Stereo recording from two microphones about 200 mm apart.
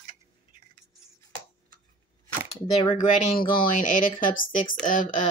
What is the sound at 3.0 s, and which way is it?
Speech, 40° left (ahead or behind).